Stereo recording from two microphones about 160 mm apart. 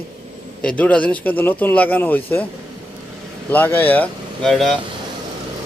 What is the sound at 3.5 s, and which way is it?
Speech, 10° left (ahead or behind).